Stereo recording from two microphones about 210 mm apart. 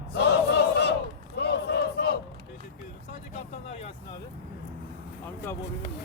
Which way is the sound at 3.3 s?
30° left (ahead or behind).